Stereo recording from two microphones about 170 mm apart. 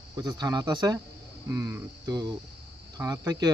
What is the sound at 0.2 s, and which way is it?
Speech, 20° right (ahead or behind).